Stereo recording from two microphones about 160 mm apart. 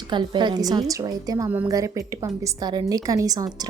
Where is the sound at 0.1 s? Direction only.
30° right (ahead or behind).